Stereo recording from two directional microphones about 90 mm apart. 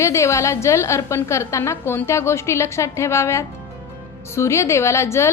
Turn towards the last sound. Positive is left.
turn(degrees=30)  # may be behind; listen again after turning